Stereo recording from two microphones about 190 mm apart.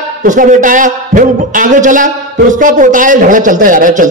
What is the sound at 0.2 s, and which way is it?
A man's voice, 45° right (ahead or behind).